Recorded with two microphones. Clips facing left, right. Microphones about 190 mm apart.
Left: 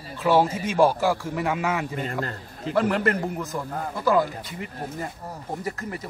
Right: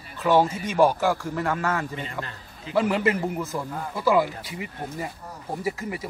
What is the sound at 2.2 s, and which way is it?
Speech, 45° left (ahead or behind).